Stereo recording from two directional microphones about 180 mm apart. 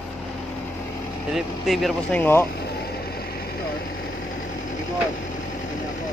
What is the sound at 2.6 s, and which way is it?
Vehicle, 60° left (ahead or behind).